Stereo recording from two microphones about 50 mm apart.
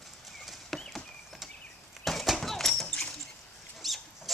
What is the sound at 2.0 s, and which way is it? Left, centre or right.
Horse, centre.